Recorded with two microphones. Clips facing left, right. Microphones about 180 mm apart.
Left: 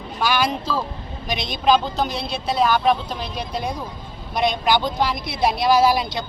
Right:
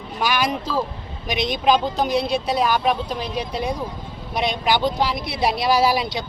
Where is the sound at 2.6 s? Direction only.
10° right (ahead or behind).